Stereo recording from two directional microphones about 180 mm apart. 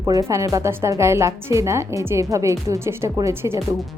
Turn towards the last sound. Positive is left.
turn(degrees=-15)  # may be behind; listen again after turning